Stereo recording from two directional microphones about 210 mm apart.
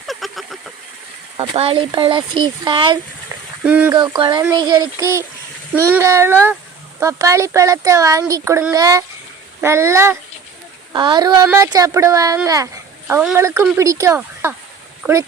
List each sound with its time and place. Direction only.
0.1 s vehicle: centre (ahead or behind)
1.4 s speech: 25° right (ahead or behind)
3.6 s a child's voice: 5° right (ahead or behind)
3.9 s a child's voice: 20° right (ahead or behind)